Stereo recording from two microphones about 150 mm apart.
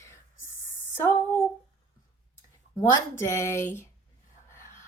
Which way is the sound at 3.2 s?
20° left (ahead or behind).